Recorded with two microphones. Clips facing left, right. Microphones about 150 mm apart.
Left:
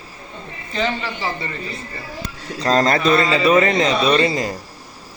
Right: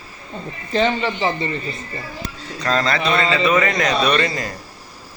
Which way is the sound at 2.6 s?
40° left (ahead or behind).